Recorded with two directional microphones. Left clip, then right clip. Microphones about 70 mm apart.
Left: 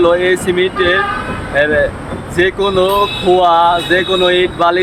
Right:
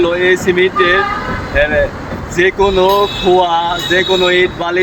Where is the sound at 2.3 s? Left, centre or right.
Left.